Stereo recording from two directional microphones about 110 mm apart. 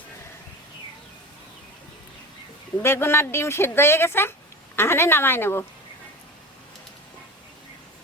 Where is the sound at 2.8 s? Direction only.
20° left (ahead or behind).